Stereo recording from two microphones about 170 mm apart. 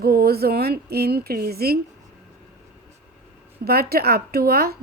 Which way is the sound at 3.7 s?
65° right (ahead or behind).